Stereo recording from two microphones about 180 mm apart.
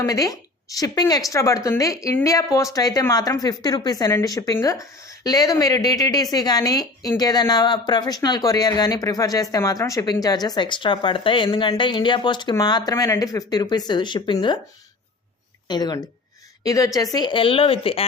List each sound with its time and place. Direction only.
0.0 s speech: 20° left (ahead or behind)
15.6 s speech: 25° left (ahead or behind)